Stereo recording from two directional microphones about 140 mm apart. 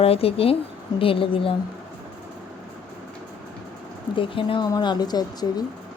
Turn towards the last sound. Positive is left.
turn(degrees=30)  # may be behind; listen again after turning